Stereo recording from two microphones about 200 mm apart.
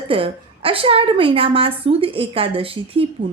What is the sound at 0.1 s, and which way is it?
A woman's voice, 25° right (ahead or behind).